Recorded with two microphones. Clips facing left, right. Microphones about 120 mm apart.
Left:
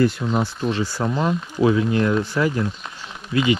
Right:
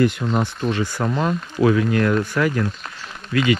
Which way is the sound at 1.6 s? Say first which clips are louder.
Right 1 dB; 25° left (ahead or behind).